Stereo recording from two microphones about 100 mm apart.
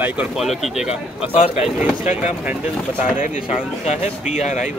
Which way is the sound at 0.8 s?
80° left.